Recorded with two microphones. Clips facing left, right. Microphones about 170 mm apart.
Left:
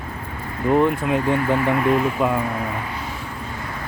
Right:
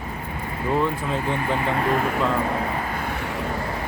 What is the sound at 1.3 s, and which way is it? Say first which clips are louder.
Speech: left 4 dB; 20° right (ahead or behind).